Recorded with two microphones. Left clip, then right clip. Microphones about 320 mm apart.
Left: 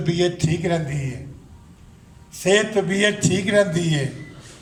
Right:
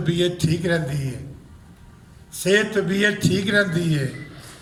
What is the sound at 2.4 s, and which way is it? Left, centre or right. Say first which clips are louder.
A man's voice: left 1 dB; left.